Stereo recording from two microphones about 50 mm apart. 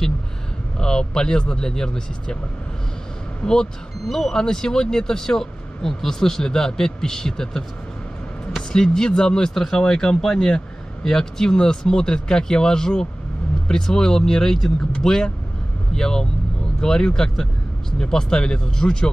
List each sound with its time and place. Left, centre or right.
0.7 s speech: centre
3.4 s speech: centre